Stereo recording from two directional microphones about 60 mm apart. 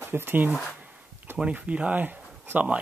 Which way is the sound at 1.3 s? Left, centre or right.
Centre.